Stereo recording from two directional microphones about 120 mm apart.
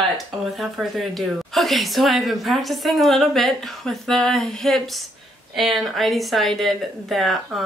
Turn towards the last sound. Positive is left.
turn(degrees=0)  # may be behind; listen again after turning